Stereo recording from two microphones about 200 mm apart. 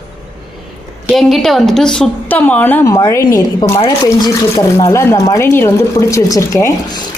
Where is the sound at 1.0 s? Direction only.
Centre (ahead or behind).